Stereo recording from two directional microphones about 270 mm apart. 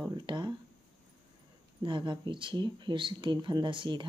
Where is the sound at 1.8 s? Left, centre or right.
Centre.